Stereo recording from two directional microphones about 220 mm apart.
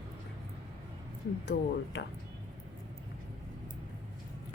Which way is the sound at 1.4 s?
55° left (ahead or behind).